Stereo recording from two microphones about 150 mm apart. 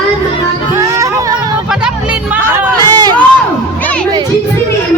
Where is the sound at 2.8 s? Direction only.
25° right (ahead or behind).